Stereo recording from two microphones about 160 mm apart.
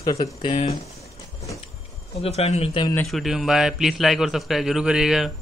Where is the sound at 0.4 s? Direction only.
40° left (ahead or behind).